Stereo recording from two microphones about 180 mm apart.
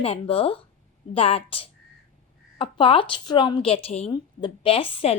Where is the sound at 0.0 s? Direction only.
30° left (ahead or behind).